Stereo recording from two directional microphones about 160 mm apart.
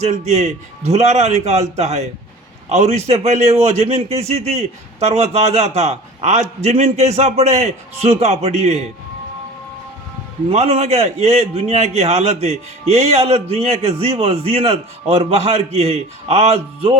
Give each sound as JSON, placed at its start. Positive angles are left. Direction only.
{"t": 0.0, "sound": "a man's voice", "side_deg": -45}
{"t": 10.5, "sound": "a man's voice", "side_deg": -40}